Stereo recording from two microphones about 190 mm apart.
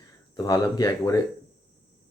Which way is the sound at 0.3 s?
20° left (ahead or behind).